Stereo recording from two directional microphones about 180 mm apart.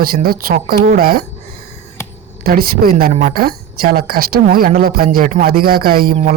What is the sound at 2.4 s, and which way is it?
Speech, 55° right (ahead or behind).